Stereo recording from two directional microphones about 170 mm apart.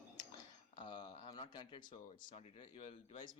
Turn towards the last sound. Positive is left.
turn(degrees=35)  # may be behind; listen again after turning